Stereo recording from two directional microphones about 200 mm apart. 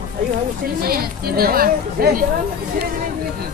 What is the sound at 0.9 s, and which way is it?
Speech, 50° right (ahead or behind).